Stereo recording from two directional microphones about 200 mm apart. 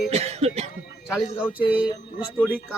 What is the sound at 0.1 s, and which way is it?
Cough, 30° right (ahead or behind).